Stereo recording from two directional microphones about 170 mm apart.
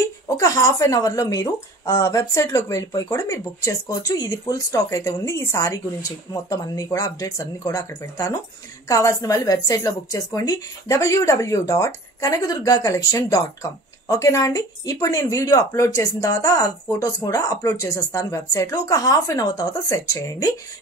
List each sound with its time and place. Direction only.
0.4 s a woman's voice: 20° left (ahead or behind)